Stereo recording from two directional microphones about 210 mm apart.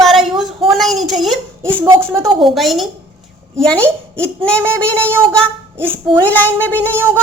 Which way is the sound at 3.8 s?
10° right (ahead or behind).